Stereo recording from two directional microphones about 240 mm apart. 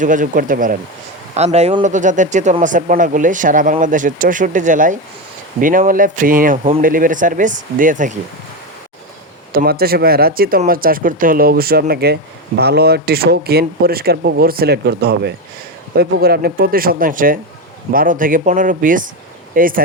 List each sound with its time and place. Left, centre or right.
0.0 s speech: right
9.5 s speech: right